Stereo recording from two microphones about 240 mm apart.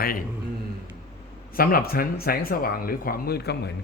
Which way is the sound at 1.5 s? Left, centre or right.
Left.